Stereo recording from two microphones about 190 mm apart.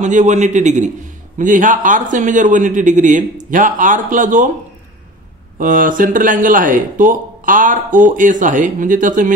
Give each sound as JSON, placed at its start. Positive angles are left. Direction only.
{"t": 0.0, "sound": "a man's voice", "side_deg": -40}
{"t": 5.6, "sound": "speech", "side_deg": -45}